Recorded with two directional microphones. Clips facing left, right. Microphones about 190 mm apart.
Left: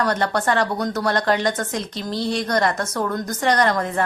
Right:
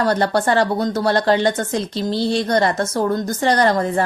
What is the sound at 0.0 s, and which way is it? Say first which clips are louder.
Speech: right 4 dB; 30° right (ahead or behind).